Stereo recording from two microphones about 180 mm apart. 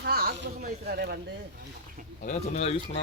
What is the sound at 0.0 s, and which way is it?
Speech, 60° right (ahead or behind).